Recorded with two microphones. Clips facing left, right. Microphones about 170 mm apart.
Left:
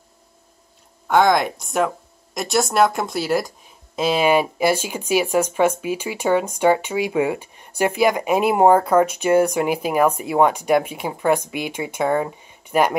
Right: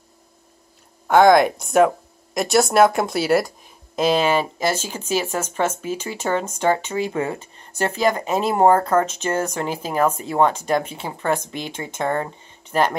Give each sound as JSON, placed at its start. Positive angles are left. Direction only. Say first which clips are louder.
{"t": 1.0, "sound": "speech", "louder": "right 3 dB", "side_deg": -5}